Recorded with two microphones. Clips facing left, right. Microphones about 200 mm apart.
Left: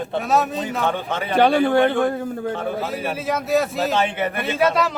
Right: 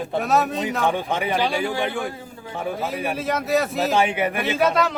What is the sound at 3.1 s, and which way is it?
Speech, centre (ahead or behind).